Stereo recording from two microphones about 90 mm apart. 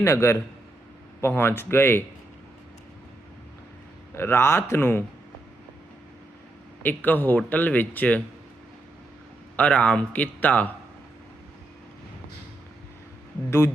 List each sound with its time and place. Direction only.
0.0 s a man's voice: 35° left (ahead or behind)
1.2 s speech: 25° left (ahead or behind)
4.1 s speech: 30° left (ahead or behind)
6.8 s speech: 20° left (ahead or behind)
9.6 s a man's voice: 15° left (ahead or behind)